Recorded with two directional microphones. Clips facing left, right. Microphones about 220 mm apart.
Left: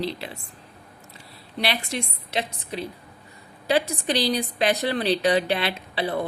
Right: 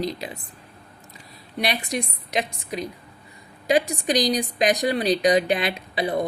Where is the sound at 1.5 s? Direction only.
15° right (ahead or behind).